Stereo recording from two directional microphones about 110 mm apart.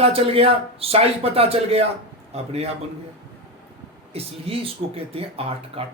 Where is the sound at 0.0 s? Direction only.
60° right (ahead or behind).